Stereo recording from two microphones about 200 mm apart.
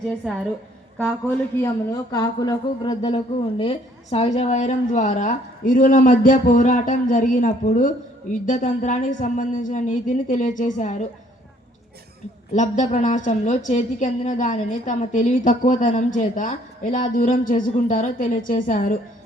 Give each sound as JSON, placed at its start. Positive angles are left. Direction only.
{"t": 1.6, "sound": "speech", "side_deg": 20}
{"t": 12.5, "sound": "speech", "side_deg": 35}